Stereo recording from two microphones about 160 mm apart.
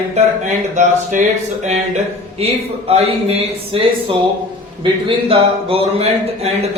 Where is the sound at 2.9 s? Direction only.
40° right (ahead or behind).